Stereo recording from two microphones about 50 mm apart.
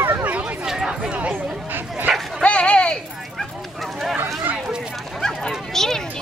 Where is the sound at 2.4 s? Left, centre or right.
Left.